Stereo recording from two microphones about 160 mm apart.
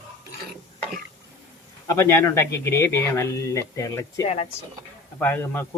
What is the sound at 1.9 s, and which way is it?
A man's voice, 15° left (ahead or behind).